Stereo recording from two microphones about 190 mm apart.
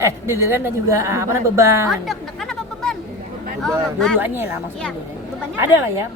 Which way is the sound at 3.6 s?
5° left (ahead or behind).